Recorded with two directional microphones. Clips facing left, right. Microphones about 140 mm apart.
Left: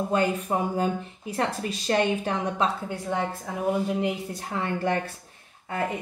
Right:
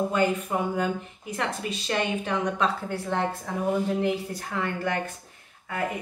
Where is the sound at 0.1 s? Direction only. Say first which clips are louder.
Even; 35° left (ahead or behind).